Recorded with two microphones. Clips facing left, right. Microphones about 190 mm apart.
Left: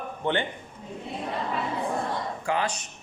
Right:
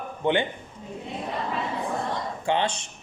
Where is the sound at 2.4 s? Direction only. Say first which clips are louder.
Right 4 dB; 25° right (ahead or behind).